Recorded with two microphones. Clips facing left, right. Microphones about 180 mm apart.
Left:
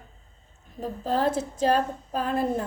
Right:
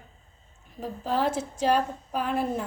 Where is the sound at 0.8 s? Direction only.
45° left (ahead or behind).